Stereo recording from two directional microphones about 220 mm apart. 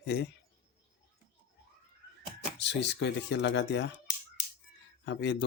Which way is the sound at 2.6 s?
50° left (ahead or behind).